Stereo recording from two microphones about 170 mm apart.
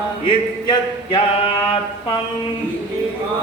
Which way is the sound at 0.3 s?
30° left (ahead or behind).